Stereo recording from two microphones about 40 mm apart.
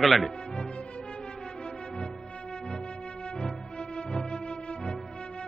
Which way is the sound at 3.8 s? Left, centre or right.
Left.